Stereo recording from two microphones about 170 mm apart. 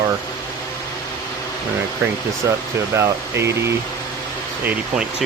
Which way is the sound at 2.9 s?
15° right (ahead or behind).